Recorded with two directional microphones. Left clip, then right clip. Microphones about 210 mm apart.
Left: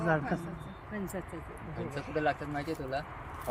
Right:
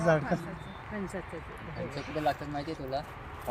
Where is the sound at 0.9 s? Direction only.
55° left (ahead or behind).